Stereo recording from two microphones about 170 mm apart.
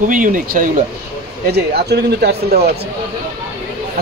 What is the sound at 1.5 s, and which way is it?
A man's voice, 70° right (ahead or behind).